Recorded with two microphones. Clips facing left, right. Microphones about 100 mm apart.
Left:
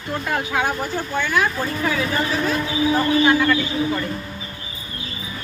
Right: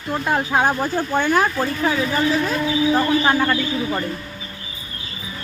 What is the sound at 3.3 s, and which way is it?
Speech, 40° right (ahead or behind).